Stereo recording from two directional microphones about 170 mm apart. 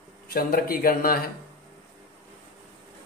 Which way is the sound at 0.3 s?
60° left (ahead or behind).